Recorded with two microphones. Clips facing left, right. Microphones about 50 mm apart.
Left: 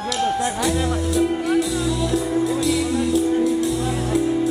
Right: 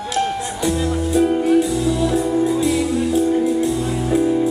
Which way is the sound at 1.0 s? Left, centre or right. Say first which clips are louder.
Right 6 dB; right.